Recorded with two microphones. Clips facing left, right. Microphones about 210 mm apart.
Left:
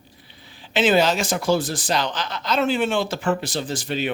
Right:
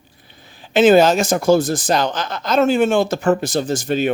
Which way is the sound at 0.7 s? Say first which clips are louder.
Right 7 dB; 45° right (ahead or behind).